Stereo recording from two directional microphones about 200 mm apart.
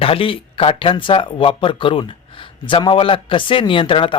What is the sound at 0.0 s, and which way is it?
Speech, 25° left (ahead or behind).